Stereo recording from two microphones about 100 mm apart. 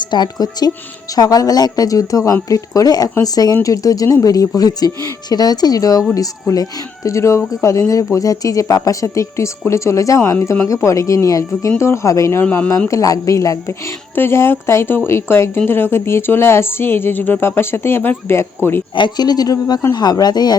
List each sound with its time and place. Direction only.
0.1 s speech: 45° left (ahead or behind); by 12.7 s 20° left (ahead or behind)
12.9 s speech: 35° left (ahead or behind)
18.9 s speech: 45° left (ahead or behind)